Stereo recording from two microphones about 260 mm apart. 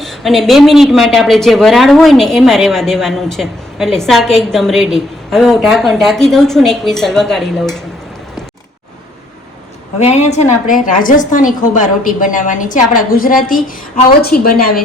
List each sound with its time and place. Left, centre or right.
0.0 s speech: centre
10.0 s a woman's voice: left